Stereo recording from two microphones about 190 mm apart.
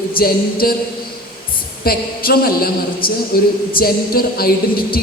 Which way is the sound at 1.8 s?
55° left (ahead or behind).